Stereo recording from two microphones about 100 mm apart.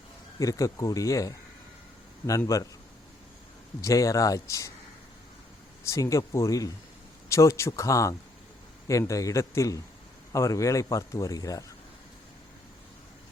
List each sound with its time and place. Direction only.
0.3 s a man's voice: 35° left (ahead or behind)
2.5 s a man's voice: 30° left (ahead or behind)
3.8 s a man's voice: 35° left (ahead or behind)
5.8 s a man's voice: 30° left (ahead or behind)